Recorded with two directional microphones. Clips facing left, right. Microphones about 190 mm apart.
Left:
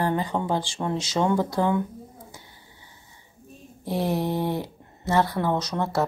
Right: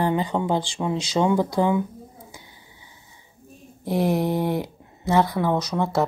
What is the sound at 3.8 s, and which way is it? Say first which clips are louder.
Speech: right 4 dB; 15° right (ahead or behind).